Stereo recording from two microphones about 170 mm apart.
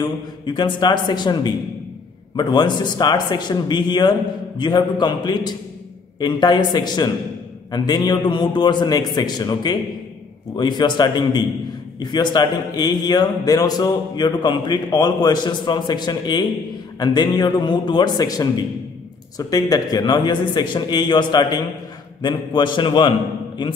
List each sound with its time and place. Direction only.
0.0 s a man's voice: 25° left (ahead or behind)